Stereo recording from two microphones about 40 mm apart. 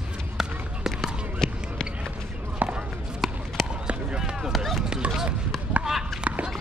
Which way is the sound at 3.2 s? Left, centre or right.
Centre.